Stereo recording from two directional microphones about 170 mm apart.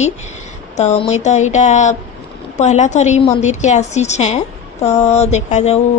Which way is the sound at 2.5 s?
45° left (ahead or behind).